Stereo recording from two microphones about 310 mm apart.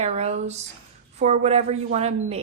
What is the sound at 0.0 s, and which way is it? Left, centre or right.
Speech, right.